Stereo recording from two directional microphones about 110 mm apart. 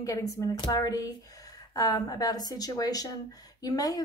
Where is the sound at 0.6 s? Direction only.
35° left (ahead or behind).